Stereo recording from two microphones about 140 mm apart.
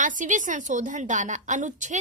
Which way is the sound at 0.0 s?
65° right (ahead or behind).